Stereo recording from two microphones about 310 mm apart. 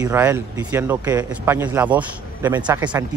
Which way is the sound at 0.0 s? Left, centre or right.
Centre.